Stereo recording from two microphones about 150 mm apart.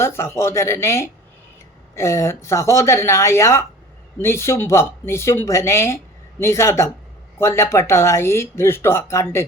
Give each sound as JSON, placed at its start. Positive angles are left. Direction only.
{"t": 0.0, "sound": "speech", "side_deg": 15}